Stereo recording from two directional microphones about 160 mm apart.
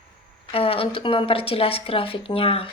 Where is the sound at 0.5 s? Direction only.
35° left (ahead or behind).